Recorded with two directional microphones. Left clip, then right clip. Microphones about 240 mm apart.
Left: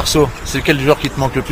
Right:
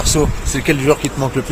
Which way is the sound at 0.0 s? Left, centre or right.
Centre.